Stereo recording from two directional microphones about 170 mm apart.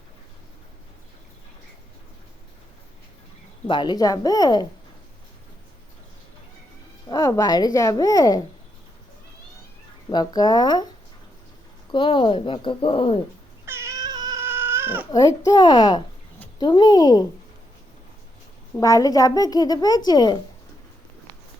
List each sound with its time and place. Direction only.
3.7 s a woman's voice: 25° left (ahead or behind)
7.1 s a woman's voice: 20° left (ahead or behind)
10.1 s a woman's voice: 25° left (ahead or behind)
11.9 s a woman's voice: 30° left (ahead or behind)
13.7 s cat: 15° right (ahead or behind)
15.1 s a woman's voice: 20° left (ahead or behind)
18.8 s a woman's voice: 20° left (ahead or behind)